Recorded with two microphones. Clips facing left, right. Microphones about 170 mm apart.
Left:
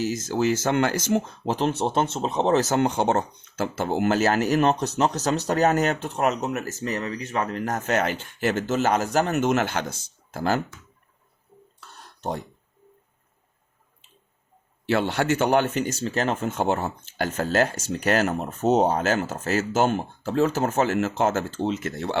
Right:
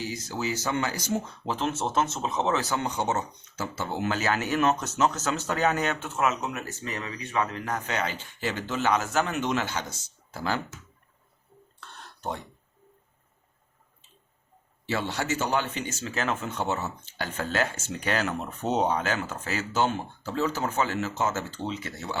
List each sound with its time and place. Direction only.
0.0 s speech: 45° left (ahead or behind)
1.2 s speech: 40° left (ahead or behind)
14.8 s speech: 60° left (ahead or behind)